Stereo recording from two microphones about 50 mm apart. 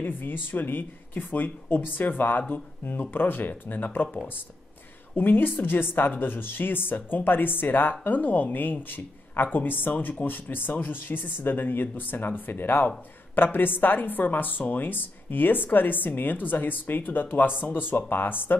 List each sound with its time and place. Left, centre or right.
0.0 s a woman's voice: left
5.1 s a woman's voice: left